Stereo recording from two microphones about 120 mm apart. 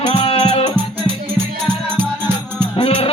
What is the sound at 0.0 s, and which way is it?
Music, 45° left (ahead or behind).